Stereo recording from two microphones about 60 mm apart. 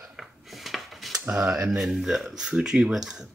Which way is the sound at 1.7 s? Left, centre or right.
Centre.